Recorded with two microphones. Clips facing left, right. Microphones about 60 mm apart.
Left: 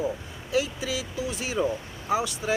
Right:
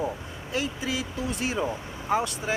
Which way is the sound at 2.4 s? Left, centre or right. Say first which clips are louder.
Left 2 dB; right.